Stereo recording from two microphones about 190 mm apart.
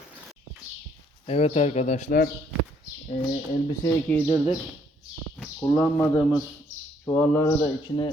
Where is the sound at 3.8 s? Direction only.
15° left (ahead or behind).